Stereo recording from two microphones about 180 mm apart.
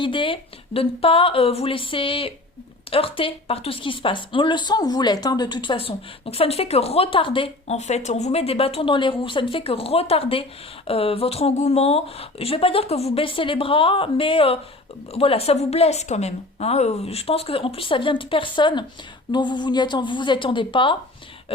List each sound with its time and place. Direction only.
0.0 s a woman's voice: 30° left (ahead or behind)